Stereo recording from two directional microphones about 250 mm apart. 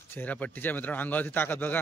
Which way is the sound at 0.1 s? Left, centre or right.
Centre.